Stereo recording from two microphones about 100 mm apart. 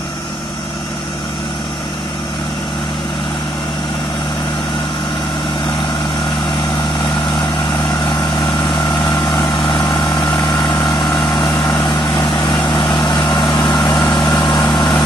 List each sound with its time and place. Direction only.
9.3 s vehicle: 45° left (ahead or behind)